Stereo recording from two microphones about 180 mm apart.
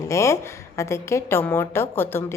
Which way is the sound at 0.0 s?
15° left (ahead or behind).